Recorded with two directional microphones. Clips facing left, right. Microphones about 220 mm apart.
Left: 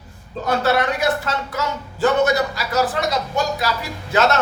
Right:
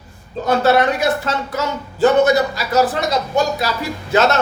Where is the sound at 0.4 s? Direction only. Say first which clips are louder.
Right 4 dB; 25° right (ahead or behind).